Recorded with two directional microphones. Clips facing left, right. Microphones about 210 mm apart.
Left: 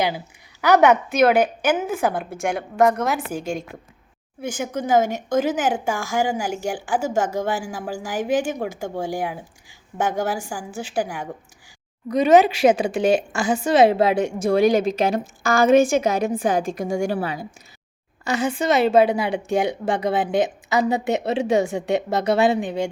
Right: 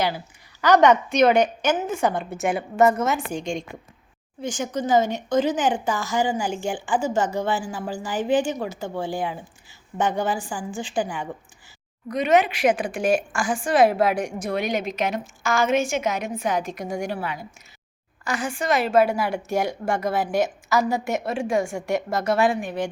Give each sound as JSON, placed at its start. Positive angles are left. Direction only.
{"t": 0.6, "sound": "a woman's voice", "side_deg": 10}
{"t": 12.2, "sound": "a woman's voice", "side_deg": 30}
{"t": 18.3, "sound": "a woman's voice", "side_deg": 25}